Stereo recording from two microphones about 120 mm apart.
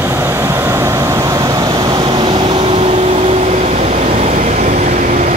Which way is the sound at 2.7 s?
55° right (ahead or behind).